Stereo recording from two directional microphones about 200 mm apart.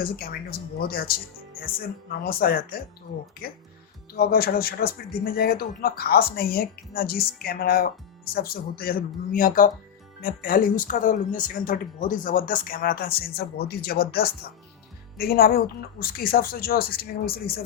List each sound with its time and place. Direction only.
0.0 s speech: 50° left (ahead or behind)
2.2 s speech: 45° left (ahead or behind)
4.1 s speech: 50° left (ahead or behind)